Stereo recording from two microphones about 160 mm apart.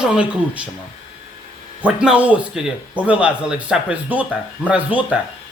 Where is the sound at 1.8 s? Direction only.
5° right (ahead or behind).